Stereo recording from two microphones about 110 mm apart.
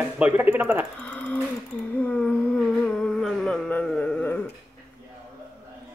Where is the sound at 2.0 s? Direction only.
15° left (ahead or behind).